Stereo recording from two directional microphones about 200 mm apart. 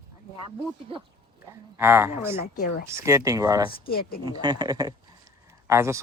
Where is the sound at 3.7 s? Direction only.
50° left (ahead or behind).